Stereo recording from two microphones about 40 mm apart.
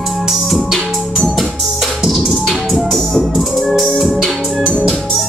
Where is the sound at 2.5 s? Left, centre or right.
Centre.